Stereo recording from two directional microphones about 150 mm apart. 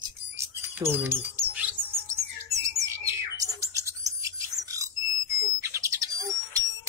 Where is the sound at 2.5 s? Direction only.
20° right (ahead or behind).